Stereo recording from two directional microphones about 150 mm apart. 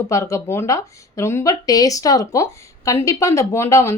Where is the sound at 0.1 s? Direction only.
20° left (ahead or behind).